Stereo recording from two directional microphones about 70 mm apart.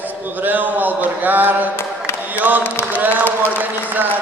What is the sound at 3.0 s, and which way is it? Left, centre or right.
Speech, right.